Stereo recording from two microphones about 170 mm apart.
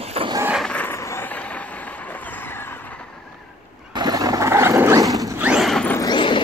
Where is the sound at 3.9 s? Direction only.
25° right (ahead or behind).